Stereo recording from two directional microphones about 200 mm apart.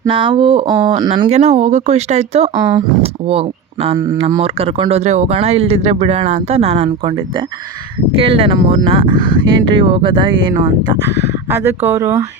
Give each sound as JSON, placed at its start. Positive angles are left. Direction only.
{"t": 0.1, "sound": "speech", "side_deg": -25}
{"t": 1.3, "sound": "speech", "side_deg": -30}
{"t": 3.9, "sound": "speech", "side_deg": -15}
{"t": 4.4, "sound": "speech", "side_deg": -30}
{"t": 11.9, "sound": "speech", "side_deg": -10}